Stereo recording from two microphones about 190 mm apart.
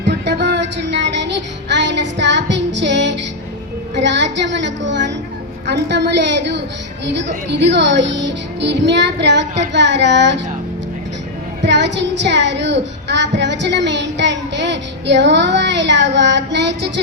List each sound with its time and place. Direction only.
0.1 s music: 60° right (ahead or behind)
1.7 s child singing: 65° right (ahead or behind)
3.9 s a woman's voice: 65° right (ahead or behind)
11.6 s speech: 65° right (ahead or behind)